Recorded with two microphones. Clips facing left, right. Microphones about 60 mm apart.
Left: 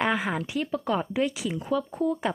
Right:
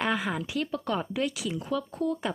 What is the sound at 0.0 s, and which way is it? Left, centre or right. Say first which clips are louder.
Speech: left 2 dB; centre.